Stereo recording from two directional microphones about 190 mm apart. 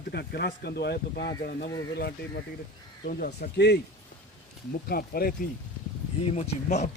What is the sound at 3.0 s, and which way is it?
Speech, 55° left (ahead or behind).